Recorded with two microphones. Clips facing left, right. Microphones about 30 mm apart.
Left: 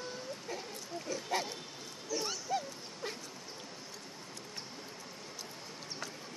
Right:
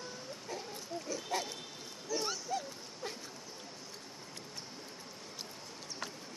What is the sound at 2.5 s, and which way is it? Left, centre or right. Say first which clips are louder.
Dog: left 2 dB; centre.